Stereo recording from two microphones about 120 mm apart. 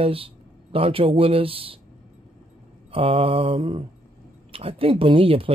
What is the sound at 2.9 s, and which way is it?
Speech, 50° right (ahead or behind).